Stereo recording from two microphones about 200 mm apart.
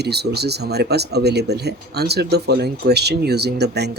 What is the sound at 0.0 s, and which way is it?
Speech, 55° right (ahead or behind).